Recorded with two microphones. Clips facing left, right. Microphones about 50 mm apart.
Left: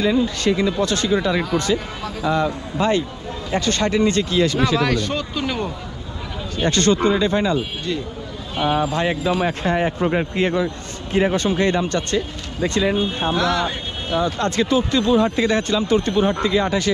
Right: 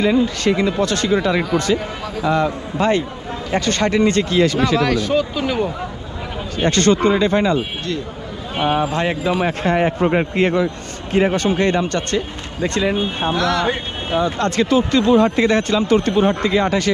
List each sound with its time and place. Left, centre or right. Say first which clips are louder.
0.0 s speech: right 2 dB; right
1.1 s a man's voice: right 3 dB; right
2.3 s speech: right 2 dB; right
4.8 s speech: right 4 dB; centre
6.7 s speech: right 2 dB; right
8.7 s speech: even; right
9.4 s a man's voice: right 2 dB; right